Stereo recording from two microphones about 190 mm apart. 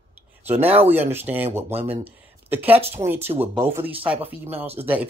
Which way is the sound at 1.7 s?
30° right (ahead or behind).